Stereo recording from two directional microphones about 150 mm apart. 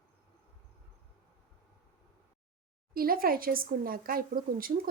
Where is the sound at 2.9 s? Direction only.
75° right (ahead or behind).